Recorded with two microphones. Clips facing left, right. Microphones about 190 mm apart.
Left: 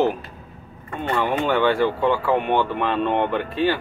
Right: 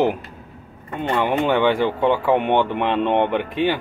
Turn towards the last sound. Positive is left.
turn(degrees=-15)  # may be behind; listen again after turning